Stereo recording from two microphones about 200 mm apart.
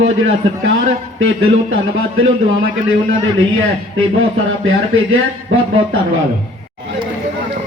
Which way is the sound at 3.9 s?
85° right.